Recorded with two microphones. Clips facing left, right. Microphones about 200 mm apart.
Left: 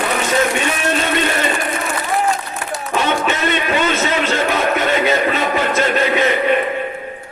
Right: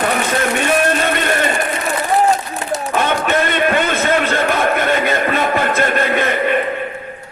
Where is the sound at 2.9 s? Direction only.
55° right (ahead or behind).